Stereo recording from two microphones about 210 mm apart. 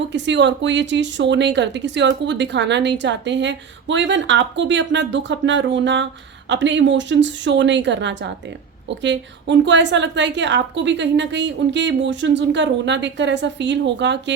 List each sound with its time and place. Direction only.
0.1 s speech: 55° right (ahead or behind)